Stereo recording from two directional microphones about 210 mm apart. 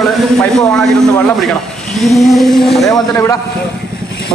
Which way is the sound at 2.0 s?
Centre (ahead or behind).